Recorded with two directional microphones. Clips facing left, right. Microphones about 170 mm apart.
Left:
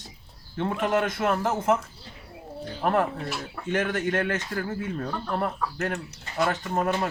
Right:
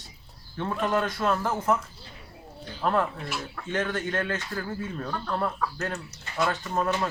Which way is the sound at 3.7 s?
20° left (ahead or behind).